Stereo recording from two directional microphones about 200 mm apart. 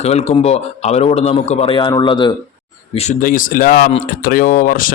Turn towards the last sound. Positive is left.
turn(degrees=40)  # may be behind; listen again after turning